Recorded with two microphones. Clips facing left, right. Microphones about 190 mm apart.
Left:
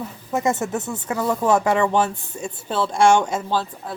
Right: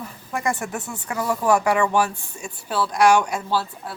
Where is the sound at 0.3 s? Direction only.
20° left (ahead or behind).